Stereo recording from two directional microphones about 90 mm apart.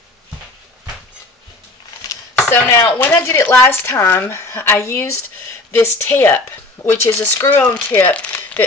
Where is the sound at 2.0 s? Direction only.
40° left (ahead or behind).